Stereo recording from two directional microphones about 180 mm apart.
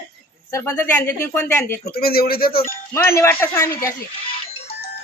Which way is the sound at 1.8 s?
60° left (ahead or behind).